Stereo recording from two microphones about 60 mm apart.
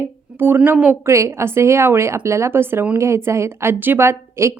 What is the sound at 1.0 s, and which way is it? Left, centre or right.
A woman's voice, right.